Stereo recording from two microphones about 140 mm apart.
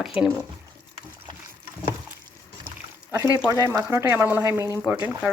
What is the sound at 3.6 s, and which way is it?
Speech, 20° right (ahead or behind).